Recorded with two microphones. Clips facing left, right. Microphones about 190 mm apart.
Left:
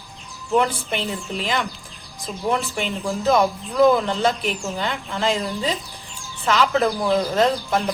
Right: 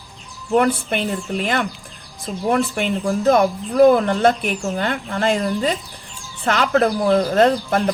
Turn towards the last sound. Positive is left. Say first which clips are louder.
# right 4 dB
turn(degrees=-55)  # may be behind; listen again after turning